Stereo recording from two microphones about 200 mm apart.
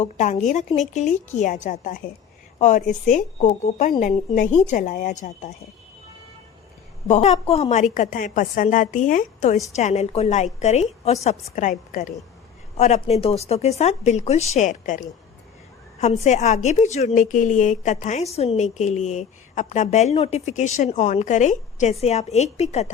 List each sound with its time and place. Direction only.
0.0 s a woman's voice: 35° left (ahead or behind)
7.1 s a woman's voice: 35° left (ahead or behind)